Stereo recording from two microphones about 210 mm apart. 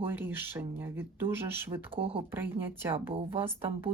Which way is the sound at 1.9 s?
25° right (ahead or behind).